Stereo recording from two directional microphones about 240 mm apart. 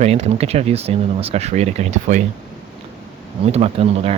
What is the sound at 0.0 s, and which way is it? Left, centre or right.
Speech, right.